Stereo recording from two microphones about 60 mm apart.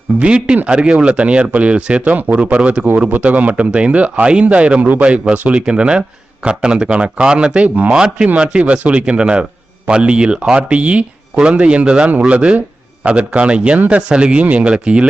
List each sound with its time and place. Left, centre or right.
0.2 s speech: centre